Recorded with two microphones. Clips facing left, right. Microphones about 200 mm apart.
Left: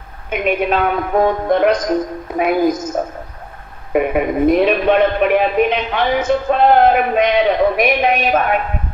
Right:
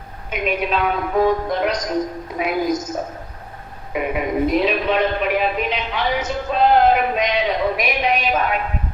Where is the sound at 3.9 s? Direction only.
55° left (ahead or behind).